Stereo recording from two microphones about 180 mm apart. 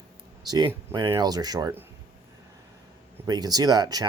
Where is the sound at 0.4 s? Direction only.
20° right (ahead or behind).